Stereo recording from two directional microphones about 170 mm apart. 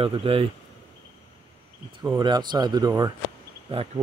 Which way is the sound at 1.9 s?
25° right (ahead or behind).